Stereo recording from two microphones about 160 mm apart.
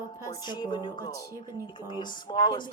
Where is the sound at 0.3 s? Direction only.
25° left (ahead or behind).